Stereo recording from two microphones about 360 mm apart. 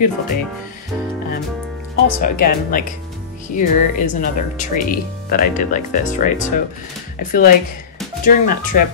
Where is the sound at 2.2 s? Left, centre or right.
Left.